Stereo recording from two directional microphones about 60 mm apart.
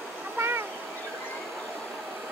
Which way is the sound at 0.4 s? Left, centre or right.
Right.